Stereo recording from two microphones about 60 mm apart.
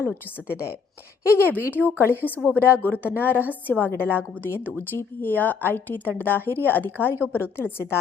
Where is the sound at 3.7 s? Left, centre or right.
Left.